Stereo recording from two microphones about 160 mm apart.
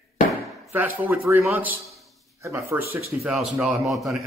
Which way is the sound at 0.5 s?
15° right (ahead or behind).